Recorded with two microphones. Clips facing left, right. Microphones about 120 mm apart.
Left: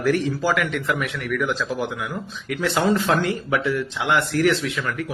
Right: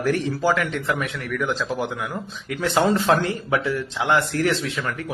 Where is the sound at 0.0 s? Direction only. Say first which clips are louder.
Even; 30° right (ahead or behind).